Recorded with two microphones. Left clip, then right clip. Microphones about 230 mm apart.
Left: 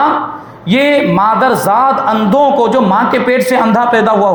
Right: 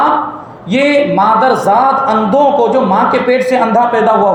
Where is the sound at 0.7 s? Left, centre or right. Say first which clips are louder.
Even; left.